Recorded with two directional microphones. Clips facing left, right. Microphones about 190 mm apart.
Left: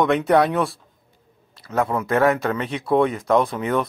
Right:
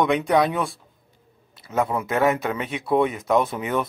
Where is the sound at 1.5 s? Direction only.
Centre (ahead or behind).